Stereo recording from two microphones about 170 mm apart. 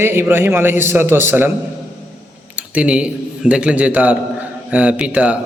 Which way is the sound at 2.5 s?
5° right (ahead or behind).